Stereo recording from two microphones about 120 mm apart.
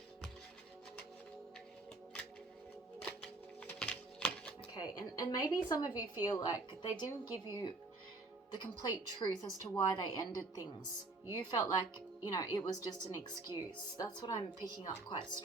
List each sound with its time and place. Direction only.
3.6 s music: 10° left (ahead or behind)
4.7 s a woman's voice: 35° left (ahead or behind)